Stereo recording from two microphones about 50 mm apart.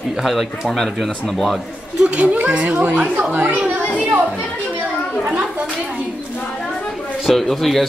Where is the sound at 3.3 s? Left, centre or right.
Right.